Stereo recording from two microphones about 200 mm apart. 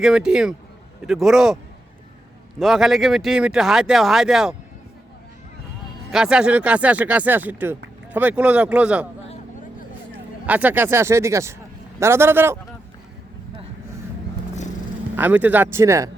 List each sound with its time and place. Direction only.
0.0 s speech: 5° right (ahead or behind)
2.6 s speech: centre (ahead or behind)
6.1 s speech: 5° right (ahead or behind)
10.4 s speech: 10° right (ahead or behind)
15.1 s speech: 10° right (ahead or behind)